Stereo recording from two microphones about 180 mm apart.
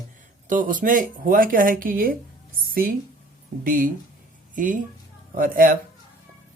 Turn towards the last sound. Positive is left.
turn(degrees=-50)  # may be behind; listen again after turning